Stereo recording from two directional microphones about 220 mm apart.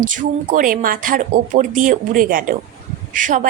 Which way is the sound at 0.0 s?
35° right (ahead or behind).